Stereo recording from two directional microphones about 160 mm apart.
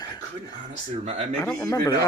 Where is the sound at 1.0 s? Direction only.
40° right (ahead or behind).